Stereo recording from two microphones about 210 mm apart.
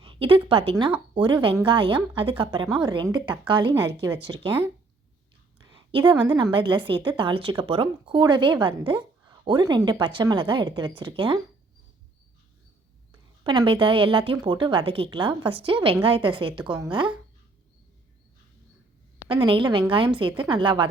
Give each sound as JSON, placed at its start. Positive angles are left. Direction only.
{"t": 0.0, "sound": "a woman's voice", "side_deg": -25}
{"t": 5.6, "sound": "a woman's voice", "side_deg": -20}
{"t": 13.1, "sound": "a woman's voice", "side_deg": -20}
{"t": 19.3, "sound": "a woman's voice", "side_deg": -25}